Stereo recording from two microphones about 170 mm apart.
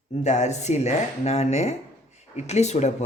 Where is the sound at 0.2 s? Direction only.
45° left (ahead or behind).